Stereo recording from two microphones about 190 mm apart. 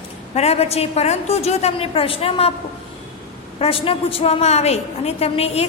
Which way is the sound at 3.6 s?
30° left (ahead or behind).